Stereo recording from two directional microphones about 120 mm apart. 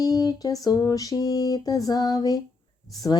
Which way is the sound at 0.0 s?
30° left (ahead or behind).